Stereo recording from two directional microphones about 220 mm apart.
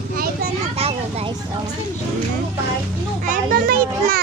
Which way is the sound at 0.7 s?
25° right (ahead or behind).